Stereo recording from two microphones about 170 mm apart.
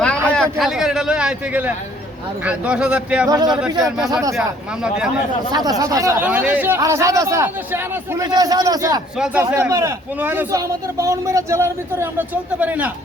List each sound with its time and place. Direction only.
0.3 s a sound: 5° left (ahead or behind)
0.6 s a man's voice: 5° right (ahead or behind)
3.2 s speech: 25° right (ahead or behind)
3.9 s a man's voice: centre (ahead or behind)
5.5 s speech: 25° right (ahead or behind)
6.2 s speech: 10° right (ahead or behind)
9.1 s a man's voice: 5° right (ahead or behind)
9.5 s speech: 15° right (ahead or behind)